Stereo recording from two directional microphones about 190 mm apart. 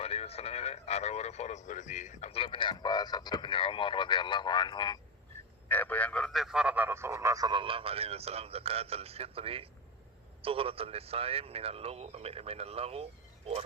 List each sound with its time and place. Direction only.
0.0 s speech: 30° left (ahead or behind)
5.6 s a man's voice: 10° left (ahead or behind); by 13.7 s 30° right (ahead or behind)